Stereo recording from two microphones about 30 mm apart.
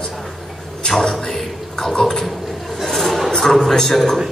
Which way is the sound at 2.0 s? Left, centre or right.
Centre.